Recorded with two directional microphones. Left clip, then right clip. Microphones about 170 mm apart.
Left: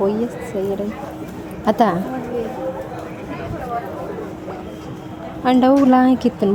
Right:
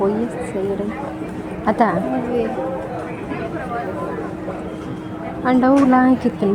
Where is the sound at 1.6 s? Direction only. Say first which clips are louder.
Left 1 dB; 35° left (ahead or behind).